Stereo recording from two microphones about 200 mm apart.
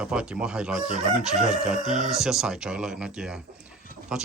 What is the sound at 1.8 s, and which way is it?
Speech, 35° right (ahead or behind).